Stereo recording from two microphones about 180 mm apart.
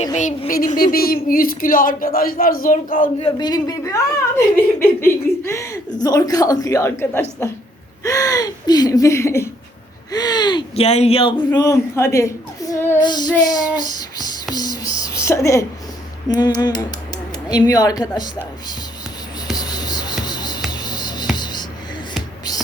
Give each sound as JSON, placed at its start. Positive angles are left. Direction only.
{"t": 0.0, "sound": "a woman's voice", "side_deg": 40}
{"t": 3.3, "sound": "a woman's voice", "side_deg": 20}
{"t": 14.5, "sound": "a sound", "side_deg": 20}
{"t": 15.2, "sound": "a woman's voice", "side_deg": 15}
{"t": 19.5, "sound": "music", "side_deg": 25}
{"t": 20.7, "sound": "basketball bounce", "side_deg": 25}
{"t": 21.3, "sound": "a sound", "side_deg": 25}
{"t": 22.5, "sound": "music", "side_deg": 20}